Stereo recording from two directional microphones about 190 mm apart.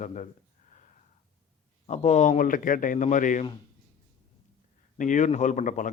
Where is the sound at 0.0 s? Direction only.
40° left (ahead or behind).